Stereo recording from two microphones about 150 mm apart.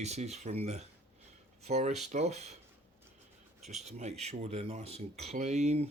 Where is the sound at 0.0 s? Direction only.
50° right (ahead or behind).